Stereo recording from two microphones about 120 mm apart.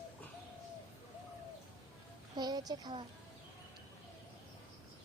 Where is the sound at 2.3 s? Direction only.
35° right (ahead or behind).